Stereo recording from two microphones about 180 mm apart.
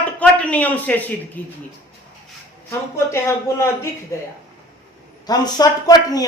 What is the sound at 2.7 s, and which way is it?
A man's voice, 15° left (ahead or behind).